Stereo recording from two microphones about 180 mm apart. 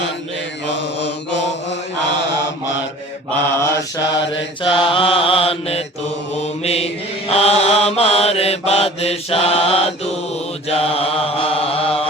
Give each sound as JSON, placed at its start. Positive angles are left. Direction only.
{"t": 0.7, "sound": "mantra", "side_deg": 75}
{"t": 3.5, "sound": "mantra", "side_deg": 15}